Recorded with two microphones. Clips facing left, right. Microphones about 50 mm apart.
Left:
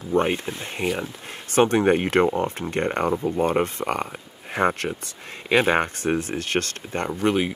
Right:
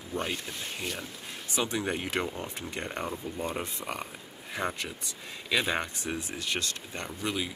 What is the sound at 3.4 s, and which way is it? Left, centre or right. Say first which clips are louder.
Speech: left 12 dB; left.